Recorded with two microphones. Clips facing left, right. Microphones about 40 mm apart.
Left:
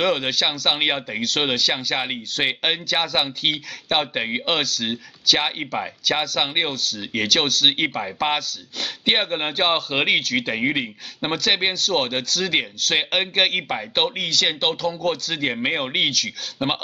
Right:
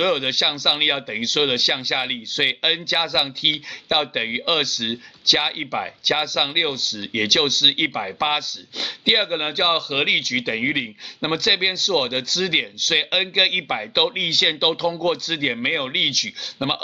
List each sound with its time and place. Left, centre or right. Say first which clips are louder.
0.0 s speech: right 1 dB; centre